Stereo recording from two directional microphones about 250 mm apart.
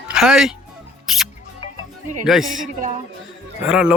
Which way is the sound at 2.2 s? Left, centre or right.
Centre.